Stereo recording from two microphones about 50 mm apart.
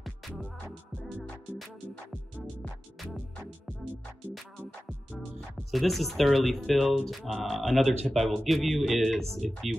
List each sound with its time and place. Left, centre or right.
0.4 s music: centre
5.7 s speech: centre